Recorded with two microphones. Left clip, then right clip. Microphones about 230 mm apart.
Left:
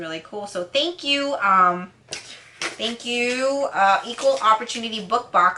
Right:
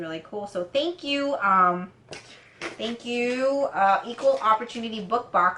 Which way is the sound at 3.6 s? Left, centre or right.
Centre.